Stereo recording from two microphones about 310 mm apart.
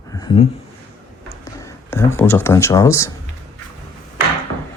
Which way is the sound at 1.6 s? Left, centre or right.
Centre.